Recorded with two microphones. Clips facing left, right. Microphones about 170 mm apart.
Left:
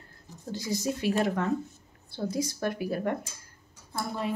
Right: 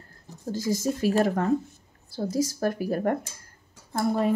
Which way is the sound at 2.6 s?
40° right (ahead or behind).